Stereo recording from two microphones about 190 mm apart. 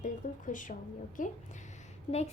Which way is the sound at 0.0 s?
45° left (ahead or behind).